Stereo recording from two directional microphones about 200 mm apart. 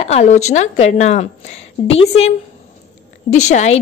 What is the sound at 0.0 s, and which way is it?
A woman's voice, 35° left (ahead or behind).